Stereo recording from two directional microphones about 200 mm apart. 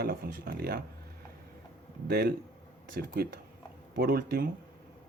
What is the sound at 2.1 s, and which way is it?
Speech, 50° right (ahead or behind).